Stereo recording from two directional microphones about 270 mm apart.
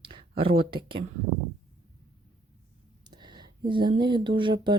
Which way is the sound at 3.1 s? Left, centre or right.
Centre.